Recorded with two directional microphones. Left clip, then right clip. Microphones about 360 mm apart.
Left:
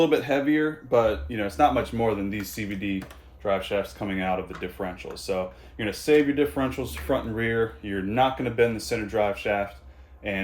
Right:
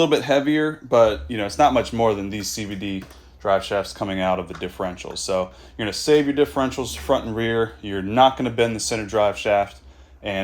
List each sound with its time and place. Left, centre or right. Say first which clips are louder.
0.0 s speech: right 4 dB; right